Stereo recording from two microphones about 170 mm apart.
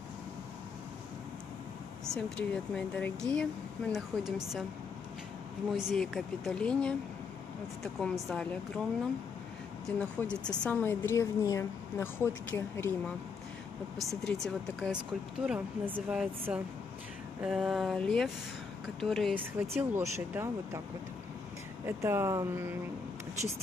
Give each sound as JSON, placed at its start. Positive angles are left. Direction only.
{"t": 2.1, "sound": "speech", "side_deg": 5}
{"t": 5.7, "sound": "speech", "side_deg": 0}
{"t": 9.8, "sound": "speech", "side_deg": 5}
{"t": 13.9, "sound": "speech", "side_deg": 0}
{"t": 16.1, "sound": "speech", "side_deg": -5}
{"t": 19.6, "sound": "speech", "side_deg": -10}
{"t": 21.8, "sound": "speech", "side_deg": -15}